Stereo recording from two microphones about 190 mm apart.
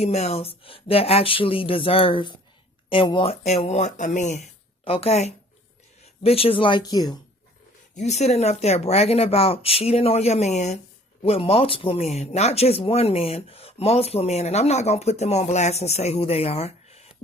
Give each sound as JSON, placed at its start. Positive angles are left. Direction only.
{"t": 0.0, "sound": "speech", "side_deg": 35}
{"t": 7.9, "sound": "speech", "side_deg": 35}